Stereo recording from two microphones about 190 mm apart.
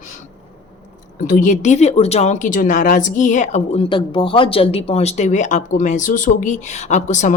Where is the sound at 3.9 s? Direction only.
25° left (ahead or behind).